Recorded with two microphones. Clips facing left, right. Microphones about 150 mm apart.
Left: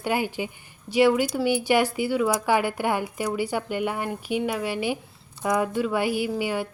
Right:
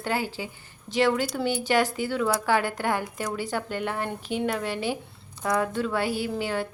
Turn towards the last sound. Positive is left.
turn(degrees=10)  # may be behind; listen again after turning